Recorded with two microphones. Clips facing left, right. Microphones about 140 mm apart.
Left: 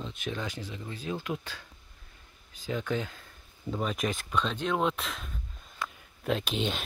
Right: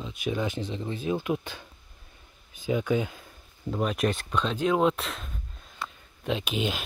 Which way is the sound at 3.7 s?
5° right (ahead or behind).